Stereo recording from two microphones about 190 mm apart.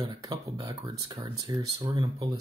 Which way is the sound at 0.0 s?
20° right (ahead or behind).